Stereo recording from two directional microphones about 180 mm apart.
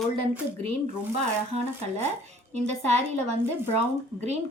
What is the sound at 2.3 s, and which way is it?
A woman's voice, 40° right (ahead or behind).